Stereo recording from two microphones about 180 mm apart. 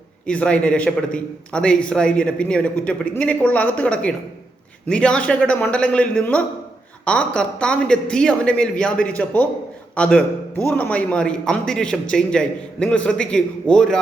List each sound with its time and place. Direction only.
0.3 s a man's voice: 5° left (ahead or behind)